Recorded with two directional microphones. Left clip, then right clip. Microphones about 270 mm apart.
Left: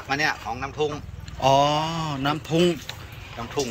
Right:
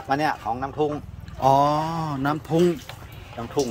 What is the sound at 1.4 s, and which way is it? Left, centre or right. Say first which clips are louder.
A man's voice: right 1 dB; centre.